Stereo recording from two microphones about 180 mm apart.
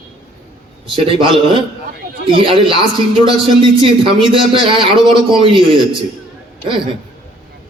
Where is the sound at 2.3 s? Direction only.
30° right (ahead or behind).